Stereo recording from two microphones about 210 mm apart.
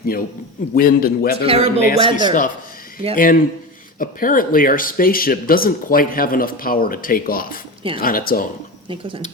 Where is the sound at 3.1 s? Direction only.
40° left (ahead or behind).